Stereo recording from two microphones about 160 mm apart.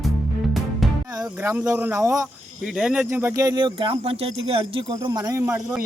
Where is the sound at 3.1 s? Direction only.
15° right (ahead or behind); by 4.6 s 35° right (ahead or behind).